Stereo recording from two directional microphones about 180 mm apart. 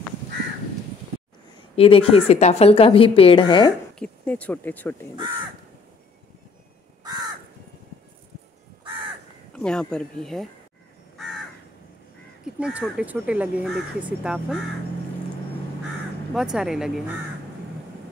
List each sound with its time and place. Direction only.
1.8 s a woman's voice: 30° left (ahead or behind)
4.0 s speech: 10° left (ahead or behind)
7.0 s crow: 25° right (ahead or behind)
9.5 s speech: 5° left (ahead or behind)
12.5 s speech: 5° right (ahead or behind)
16.3 s speech: centre (ahead or behind)